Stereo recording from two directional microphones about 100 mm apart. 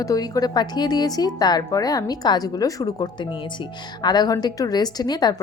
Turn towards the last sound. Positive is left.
turn(degrees=45)  # may be behind; listen again after turning